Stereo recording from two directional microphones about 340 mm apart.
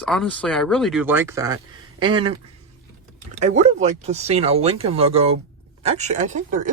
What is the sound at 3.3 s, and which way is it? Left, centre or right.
Speech, right.